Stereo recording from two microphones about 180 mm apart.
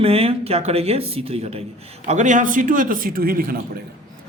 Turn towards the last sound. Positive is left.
turn(degrees=-55)  # may be behind; listen again after turning